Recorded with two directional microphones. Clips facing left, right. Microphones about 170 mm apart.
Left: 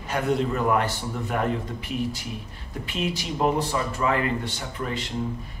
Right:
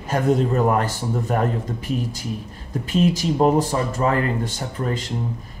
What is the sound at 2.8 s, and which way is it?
A man's voice, 40° right (ahead or behind).